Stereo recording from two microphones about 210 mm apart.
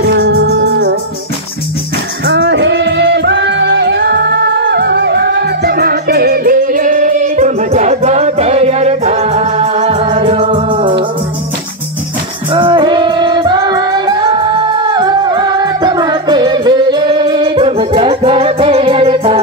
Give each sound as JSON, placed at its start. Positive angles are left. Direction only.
{"t": 0.1, "sound": "music", "side_deg": -55}
{"t": 2.2, "sound": "music", "side_deg": -55}
{"t": 10.0, "sound": "music", "side_deg": -25}
{"t": 12.5, "sound": "music", "side_deg": -25}